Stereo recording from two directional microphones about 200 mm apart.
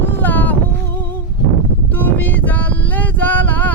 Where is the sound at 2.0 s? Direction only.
10° left (ahead or behind).